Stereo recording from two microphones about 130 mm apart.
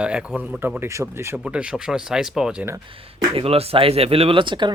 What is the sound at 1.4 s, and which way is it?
Speech, 10° right (ahead or behind).